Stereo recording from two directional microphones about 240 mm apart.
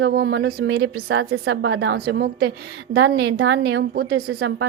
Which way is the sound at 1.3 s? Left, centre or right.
Right.